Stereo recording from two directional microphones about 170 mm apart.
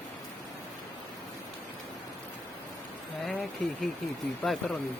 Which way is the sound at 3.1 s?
Centre (ahead or behind).